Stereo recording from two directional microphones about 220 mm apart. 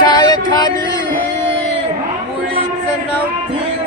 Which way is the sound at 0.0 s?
20° left (ahead or behind).